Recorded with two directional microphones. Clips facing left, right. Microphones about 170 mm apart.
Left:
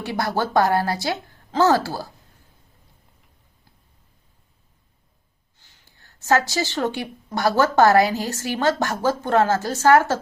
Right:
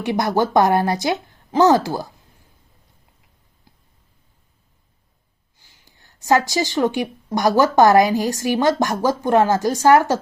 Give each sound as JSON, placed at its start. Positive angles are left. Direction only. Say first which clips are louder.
{"t": 0.0, "sound": "a woman's voice", "louder": "right 5 dB", "side_deg": -20}
{"t": 5.5, "sound": "a sound", "louder": "right 2 dB", "side_deg": -10}
{"t": 7.3, "sound": "a woman's voice", "louder": "right 3 dB", "side_deg": -15}